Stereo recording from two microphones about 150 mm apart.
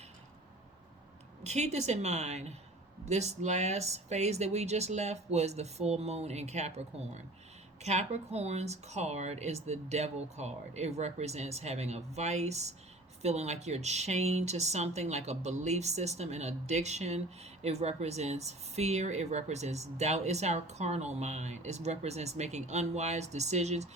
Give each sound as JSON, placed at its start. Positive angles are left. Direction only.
{"t": 1.5, "sound": "speech", "side_deg": -50}